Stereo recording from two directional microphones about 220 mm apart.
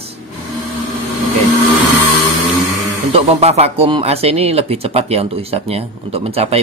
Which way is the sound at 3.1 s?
30° right (ahead or behind).